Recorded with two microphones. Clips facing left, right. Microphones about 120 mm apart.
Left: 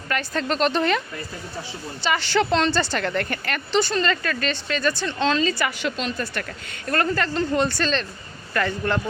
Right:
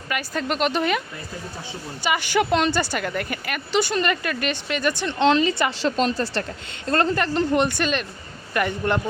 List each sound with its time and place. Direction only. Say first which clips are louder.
0.1 s a woman's voice: left 1 dB; 10° right (ahead or behind)
2.0 s a woman's voice: even; 15° right (ahead or behind)